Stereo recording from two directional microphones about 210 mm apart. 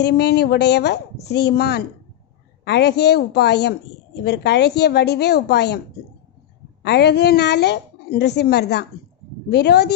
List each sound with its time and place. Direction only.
0.0 s a woman's voice: 50° left (ahead or behind)
6.8 s a woman's voice: 55° left (ahead or behind)